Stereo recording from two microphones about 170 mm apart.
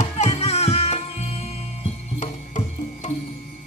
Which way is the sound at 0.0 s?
40° left (ahead or behind).